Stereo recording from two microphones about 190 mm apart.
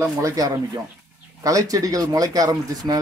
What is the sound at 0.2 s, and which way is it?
Speech, 20° right (ahead or behind).